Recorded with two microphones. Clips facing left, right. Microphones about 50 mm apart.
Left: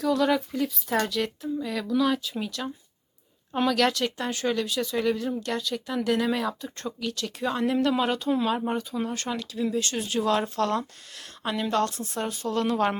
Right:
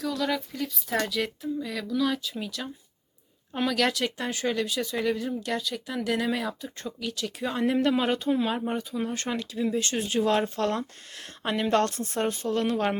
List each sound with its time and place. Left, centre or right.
0.0 s a woman's voice: centre
8.3 s speech: centre
9.1 s speech: right
12.7 s speech: centre